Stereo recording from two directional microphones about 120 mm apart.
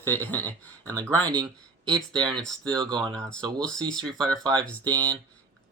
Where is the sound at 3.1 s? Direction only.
5° left (ahead or behind).